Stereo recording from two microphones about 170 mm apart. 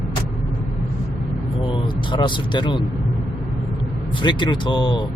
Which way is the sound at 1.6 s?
30° left (ahead or behind).